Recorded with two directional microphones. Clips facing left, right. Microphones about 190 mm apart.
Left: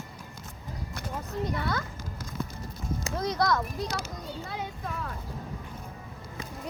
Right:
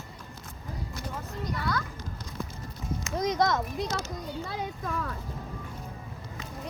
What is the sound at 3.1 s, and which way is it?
Speech, 20° right (ahead or behind).